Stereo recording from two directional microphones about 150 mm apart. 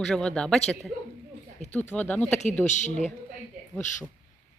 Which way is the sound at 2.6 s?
55° left (ahead or behind).